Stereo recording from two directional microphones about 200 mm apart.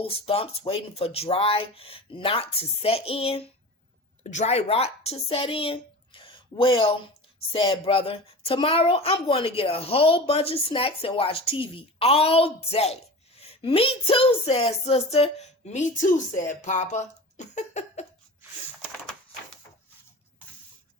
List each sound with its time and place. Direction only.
0.0 s a woman's voice: 30° left (ahead or behind)